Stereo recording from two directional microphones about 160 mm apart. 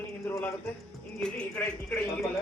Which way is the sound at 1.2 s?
5° left (ahead or behind).